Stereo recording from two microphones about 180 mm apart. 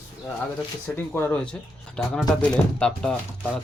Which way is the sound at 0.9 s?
10° left (ahead or behind).